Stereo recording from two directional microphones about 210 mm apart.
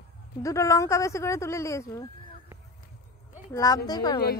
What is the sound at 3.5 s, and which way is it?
Speech, 15° left (ahead or behind).